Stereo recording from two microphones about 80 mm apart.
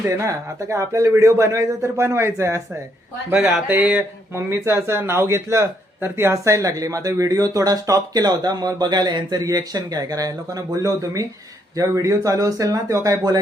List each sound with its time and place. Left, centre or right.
0.1 s speech: right
3.7 s speech: right
4.4 s a man's voice: right